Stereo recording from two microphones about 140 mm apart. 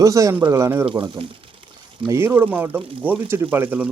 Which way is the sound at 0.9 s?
40° right (ahead or behind).